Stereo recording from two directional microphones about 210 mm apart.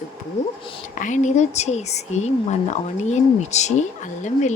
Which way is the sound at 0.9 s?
35° left (ahead or behind).